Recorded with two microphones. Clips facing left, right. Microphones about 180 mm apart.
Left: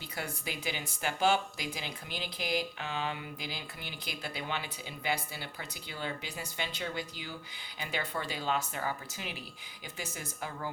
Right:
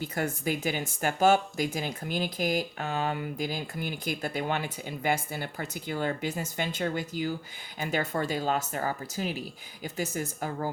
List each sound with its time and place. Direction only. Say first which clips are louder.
0.0 s speech: right 9 dB; 45° right (ahead or behind)